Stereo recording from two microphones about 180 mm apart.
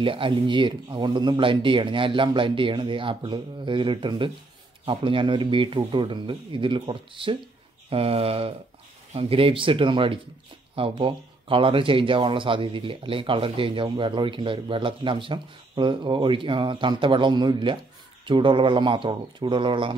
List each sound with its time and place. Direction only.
0.0 s speech: 30° right (ahead or behind)